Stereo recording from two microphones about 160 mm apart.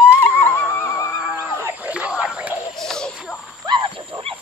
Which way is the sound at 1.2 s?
10° right (ahead or behind).